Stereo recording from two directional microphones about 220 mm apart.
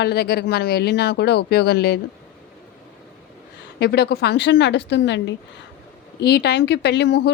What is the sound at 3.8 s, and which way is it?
Speech, 45° left (ahead or behind).